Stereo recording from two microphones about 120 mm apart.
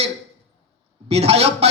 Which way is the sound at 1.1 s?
60° right (ahead or behind).